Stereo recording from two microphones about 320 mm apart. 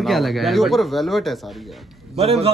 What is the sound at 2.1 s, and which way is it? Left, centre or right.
Speech, centre.